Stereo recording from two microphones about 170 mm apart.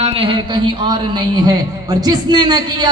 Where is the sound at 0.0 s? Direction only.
35° right (ahead or behind).